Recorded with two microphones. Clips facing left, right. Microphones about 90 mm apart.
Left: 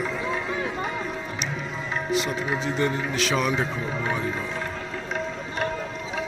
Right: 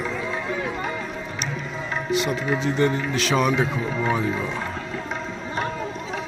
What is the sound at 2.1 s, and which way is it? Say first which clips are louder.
Speech: right 3 dB; centre (ahead or behind).